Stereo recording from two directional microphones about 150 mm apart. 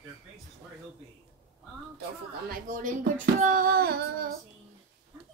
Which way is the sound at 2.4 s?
60° right (ahead or behind).